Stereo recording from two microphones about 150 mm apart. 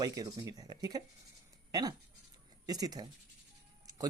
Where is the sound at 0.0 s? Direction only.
25° right (ahead or behind).